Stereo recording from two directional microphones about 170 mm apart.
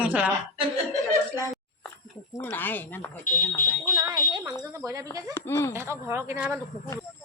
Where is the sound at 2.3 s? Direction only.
15° left (ahead or behind).